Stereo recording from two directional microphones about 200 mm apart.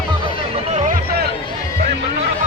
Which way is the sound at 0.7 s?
40° right (ahead or behind).